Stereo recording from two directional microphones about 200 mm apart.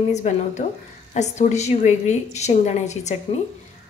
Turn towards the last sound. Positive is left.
turn(degrees=35)  # may be behind; listen again after turning